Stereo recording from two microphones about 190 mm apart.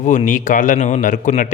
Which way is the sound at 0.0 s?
40° left (ahead or behind).